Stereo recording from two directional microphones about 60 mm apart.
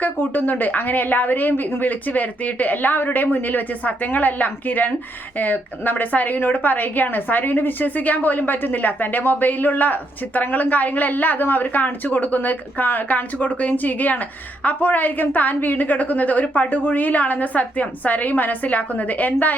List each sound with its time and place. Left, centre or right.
0.0 s a woman's voice: left